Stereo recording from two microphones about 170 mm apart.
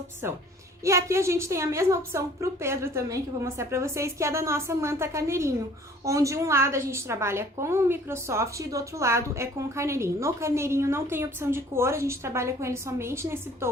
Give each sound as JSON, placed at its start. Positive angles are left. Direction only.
{"t": 0.9, "sound": "a woman's voice", "side_deg": -15}